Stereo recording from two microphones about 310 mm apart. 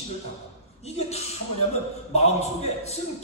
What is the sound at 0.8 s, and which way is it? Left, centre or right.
A man's voice, centre.